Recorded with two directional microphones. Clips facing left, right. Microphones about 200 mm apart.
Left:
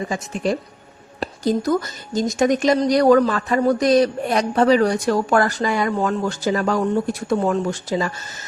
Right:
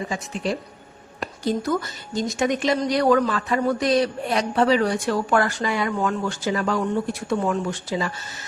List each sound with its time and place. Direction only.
1.2 s speech: 40° left (ahead or behind)